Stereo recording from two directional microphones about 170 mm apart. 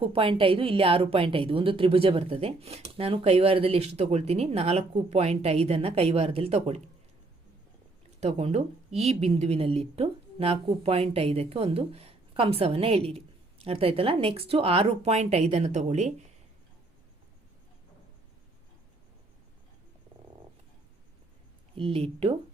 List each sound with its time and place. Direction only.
0.0 s speech: 30° right (ahead or behind)
8.2 s speech: 35° right (ahead or behind)
21.8 s speech: 35° right (ahead or behind)